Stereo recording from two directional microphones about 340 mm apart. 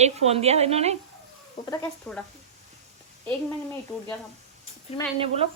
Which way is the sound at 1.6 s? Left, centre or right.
Centre.